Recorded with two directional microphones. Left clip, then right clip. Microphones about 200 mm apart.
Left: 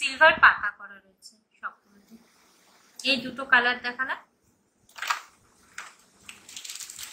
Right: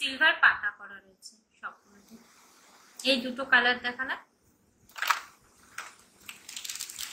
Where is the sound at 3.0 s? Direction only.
15° left (ahead or behind).